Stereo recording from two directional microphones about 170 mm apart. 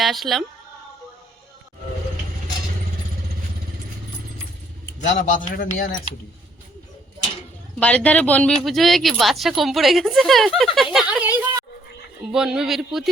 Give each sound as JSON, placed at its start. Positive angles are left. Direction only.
{"t": 0.0, "sound": "speech", "side_deg": 0}
{"t": 5.0, "sound": "speech", "side_deg": 45}
{"t": 7.8, "sound": "speech", "side_deg": 10}